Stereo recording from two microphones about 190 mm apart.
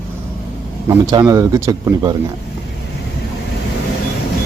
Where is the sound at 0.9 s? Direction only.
15° right (ahead or behind).